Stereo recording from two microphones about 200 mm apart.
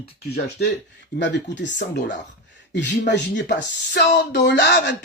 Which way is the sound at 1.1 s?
60° left (ahead or behind).